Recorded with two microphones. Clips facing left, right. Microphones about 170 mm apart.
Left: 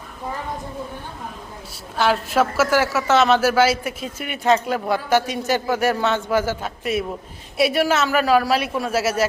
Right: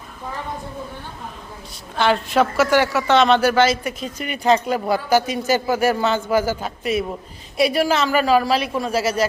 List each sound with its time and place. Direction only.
2.0 s a woman's voice: 5° left (ahead or behind)